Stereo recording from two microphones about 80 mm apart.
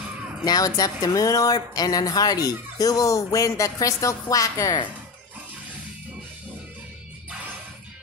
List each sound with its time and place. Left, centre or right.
0.5 s speech: left